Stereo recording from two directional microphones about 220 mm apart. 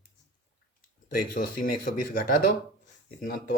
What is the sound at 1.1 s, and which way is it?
Speech, 40° left (ahead or behind).